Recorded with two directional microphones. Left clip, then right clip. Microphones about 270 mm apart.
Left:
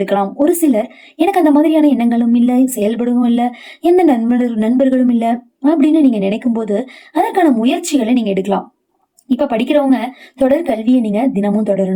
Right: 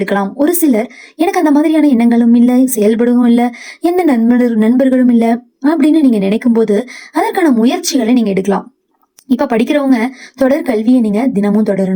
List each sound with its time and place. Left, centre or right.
0.0 s speech: right